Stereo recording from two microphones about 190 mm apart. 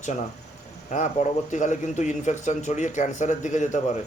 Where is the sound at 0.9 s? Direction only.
40° left (ahead or behind).